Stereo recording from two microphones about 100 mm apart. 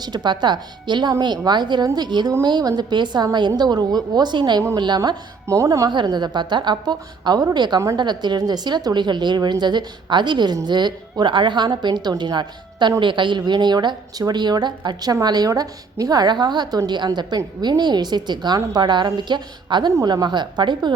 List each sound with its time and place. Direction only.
0.0 s speech: 45° right (ahead or behind)
5.5 s speech: 30° right (ahead or behind)
5.9 s speech: 50° right (ahead or behind)
19.9 s speech: 35° right (ahead or behind)